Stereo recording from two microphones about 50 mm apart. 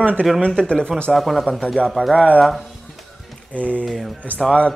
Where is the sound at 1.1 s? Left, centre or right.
Centre.